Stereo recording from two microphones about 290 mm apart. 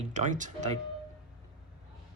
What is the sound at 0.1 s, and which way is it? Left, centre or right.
Speech, right.